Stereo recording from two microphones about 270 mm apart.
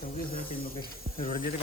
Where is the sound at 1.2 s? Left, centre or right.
Left.